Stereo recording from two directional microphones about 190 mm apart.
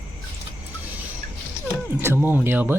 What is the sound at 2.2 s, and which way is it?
Speech, 10° right (ahead or behind).